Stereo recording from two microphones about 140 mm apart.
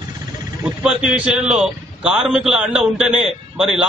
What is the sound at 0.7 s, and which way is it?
A man's voice, 5° right (ahead or behind).